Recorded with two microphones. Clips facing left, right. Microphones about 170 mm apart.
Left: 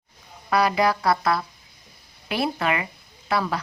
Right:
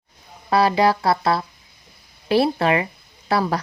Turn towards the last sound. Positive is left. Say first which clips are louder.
# right 4 dB
turn(degrees=-35)  # may be behind; listen again after turning